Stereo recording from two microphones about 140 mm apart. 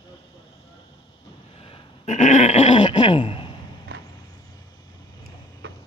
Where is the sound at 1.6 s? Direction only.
55° left (ahead or behind); by 3.4 s 40° left (ahead or behind).